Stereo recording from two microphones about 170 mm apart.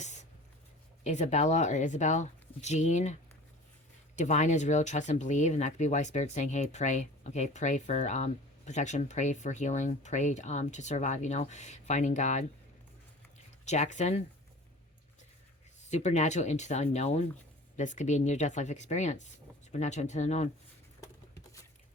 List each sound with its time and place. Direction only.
0.0 s writing: 45° left (ahead or behind)
1.0 s speech: 40° left (ahead or behind)
13.7 s speech: 45° left (ahead or behind)
15.9 s speech: 40° left (ahead or behind)